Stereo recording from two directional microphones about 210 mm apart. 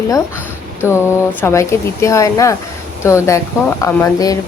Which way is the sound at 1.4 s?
10° left (ahead or behind).